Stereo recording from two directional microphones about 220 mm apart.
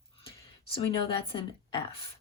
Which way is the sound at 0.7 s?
25° left (ahead or behind).